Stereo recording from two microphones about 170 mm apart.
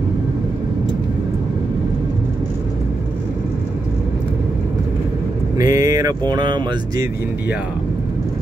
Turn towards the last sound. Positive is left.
turn(degrees=-25)  # may be behind; listen again after turning